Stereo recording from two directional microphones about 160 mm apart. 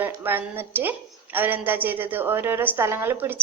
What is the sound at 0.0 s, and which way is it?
A woman's voice, 15° right (ahead or behind).